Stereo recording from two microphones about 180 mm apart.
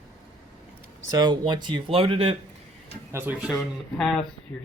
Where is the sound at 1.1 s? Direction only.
20° right (ahead or behind).